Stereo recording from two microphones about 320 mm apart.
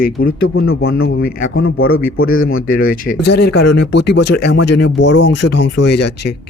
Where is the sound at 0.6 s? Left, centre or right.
Left.